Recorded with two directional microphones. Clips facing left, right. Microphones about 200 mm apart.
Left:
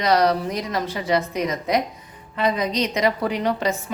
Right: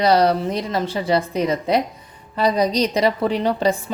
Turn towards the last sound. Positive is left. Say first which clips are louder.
# right 3 dB
turn(degrees=-30)  # may be behind; listen again after turning